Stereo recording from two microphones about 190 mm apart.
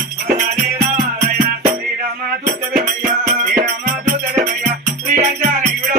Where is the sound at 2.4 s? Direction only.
45° right (ahead or behind).